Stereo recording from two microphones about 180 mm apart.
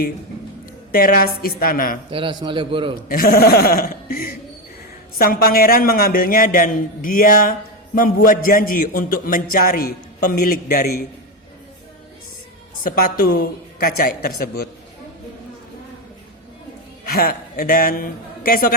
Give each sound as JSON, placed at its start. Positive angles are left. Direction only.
{"t": 0.9, "sound": "a man's voice", "side_deg": 50}
{"t": 2.0, "sound": "a man's voice", "side_deg": -30}
{"t": 3.1, "sound": "a man's voice", "side_deg": 55}
{"t": 12.8, "sound": "a man's voice", "side_deg": 50}
{"t": 17.1, "sound": "a man's voice", "side_deg": 55}